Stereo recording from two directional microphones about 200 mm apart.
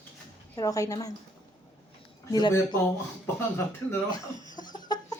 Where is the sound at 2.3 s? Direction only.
20° left (ahead or behind).